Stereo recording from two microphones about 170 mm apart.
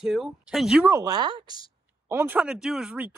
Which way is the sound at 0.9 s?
20° right (ahead or behind).